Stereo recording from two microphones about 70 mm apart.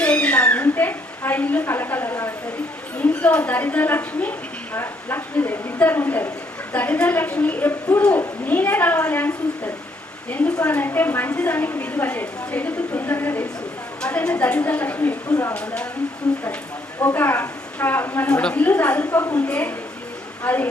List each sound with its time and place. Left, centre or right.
0.0 s a sound: centre
3.0 s a sound: centre
6.7 s a woman's voice: left
7.7 s speech: left
8.4 s a woman's voice: left
14.0 s a woman's voice: centre
17.0 s speech: left
18.3 s a woman's voice: centre